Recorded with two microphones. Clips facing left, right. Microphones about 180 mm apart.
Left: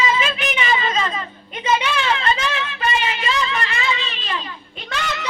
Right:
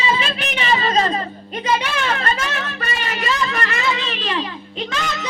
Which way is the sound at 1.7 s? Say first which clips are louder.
Left 1 dB; 45° right (ahead or behind).